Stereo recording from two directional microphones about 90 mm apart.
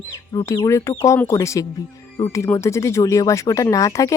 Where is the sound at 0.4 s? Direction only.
40° left (ahead or behind).